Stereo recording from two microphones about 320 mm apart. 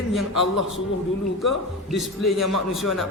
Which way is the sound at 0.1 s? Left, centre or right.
Centre.